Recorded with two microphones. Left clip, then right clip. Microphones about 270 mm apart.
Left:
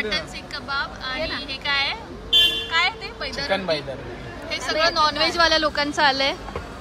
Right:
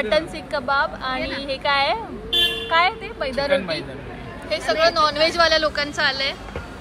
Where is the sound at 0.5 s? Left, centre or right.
Centre.